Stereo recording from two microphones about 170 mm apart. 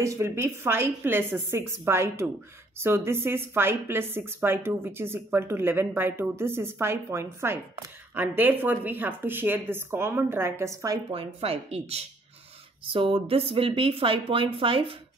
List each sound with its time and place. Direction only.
0.0 s a woman's voice: 15° right (ahead or behind)
11.1 s speech: 35° right (ahead or behind)